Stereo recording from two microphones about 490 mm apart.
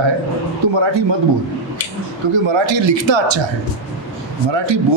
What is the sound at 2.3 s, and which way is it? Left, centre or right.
A man's voice, right.